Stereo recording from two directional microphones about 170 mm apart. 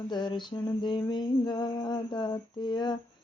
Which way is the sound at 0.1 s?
25° left (ahead or behind).